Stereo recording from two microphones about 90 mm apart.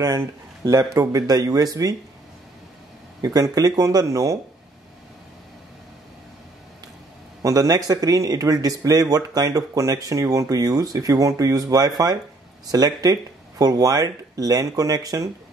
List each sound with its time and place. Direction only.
0.7 s speech: 40° right (ahead or behind)
3.3 s speech: 40° right (ahead or behind)
7.4 s speech: 45° right (ahead or behind)